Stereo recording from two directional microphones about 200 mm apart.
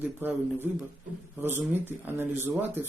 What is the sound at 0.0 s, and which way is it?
A man's voice, 10° right (ahead or behind).